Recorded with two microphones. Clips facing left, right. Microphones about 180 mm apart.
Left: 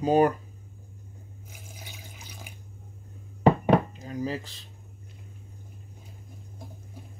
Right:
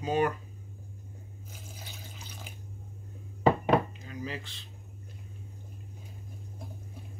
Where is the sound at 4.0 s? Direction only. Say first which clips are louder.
Left 7 dB; 40° left (ahead or behind).